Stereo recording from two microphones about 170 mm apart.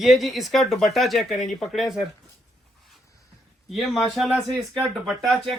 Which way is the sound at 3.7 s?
Centre (ahead or behind).